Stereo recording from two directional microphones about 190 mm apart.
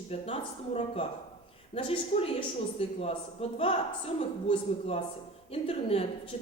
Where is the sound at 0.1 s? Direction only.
30° left (ahead or behind).